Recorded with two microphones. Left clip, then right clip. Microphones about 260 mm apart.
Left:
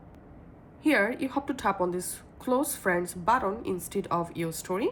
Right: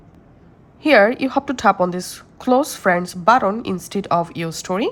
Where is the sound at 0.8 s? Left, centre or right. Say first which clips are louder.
Right 12 dB; right.